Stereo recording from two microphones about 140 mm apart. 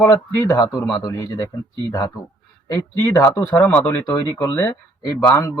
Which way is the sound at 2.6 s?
20° left (ahead or behind).